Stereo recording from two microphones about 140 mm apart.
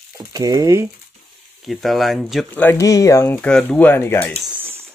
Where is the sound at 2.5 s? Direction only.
15° left (ahead or behind).